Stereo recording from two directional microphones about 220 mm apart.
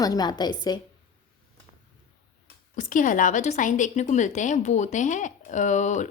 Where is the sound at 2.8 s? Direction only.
35° left (ahead or behind).